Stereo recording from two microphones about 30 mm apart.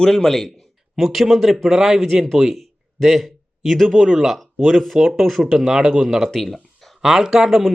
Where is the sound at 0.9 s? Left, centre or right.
Centre.